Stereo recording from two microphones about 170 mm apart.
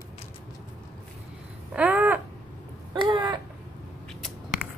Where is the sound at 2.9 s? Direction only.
25° right (ahead or behind).